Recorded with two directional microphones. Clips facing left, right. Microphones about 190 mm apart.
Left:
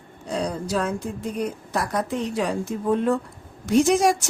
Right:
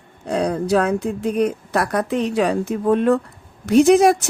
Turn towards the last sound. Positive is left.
turn(degrees=-60)  # may be behind; listen again after turning